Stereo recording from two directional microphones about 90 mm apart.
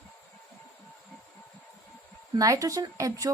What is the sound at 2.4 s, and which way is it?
Speech, 40° right (ahead or behind).